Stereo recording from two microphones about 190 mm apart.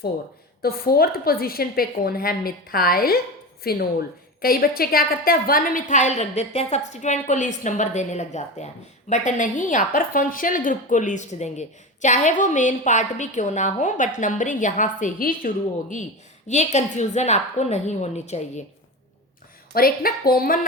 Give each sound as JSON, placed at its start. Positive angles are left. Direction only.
{"t": 0.6, "sound": "a woman's voice", "side_deg": 50}
{"t": 19.7, "sound": "a woman's voice", "side_deg": 50}